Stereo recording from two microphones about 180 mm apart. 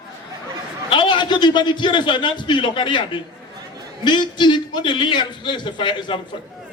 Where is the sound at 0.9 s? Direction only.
25° left (ahead or behind).